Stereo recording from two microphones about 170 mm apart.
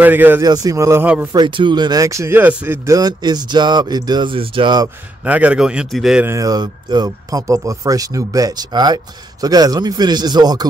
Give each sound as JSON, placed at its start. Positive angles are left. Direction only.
{"t": 0.0, "sound": "a man's voice", "side_deg": -10}
{"t": 0.4, "sound": "a man's voice", "side_deg": -20}
{"t": 1.3, "sound": "speech", "side_deg": -25}
{"t": 2.9, "sound": "speech", "side_deg": -25}
{"t": 5.2, "sound": "a man's voice", "side_deg": -10}
{"t": 6.2, "sound": "speech", "side_deg": -20}